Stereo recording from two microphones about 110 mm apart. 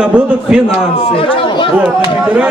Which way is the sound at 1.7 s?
10° right (ahead or behind).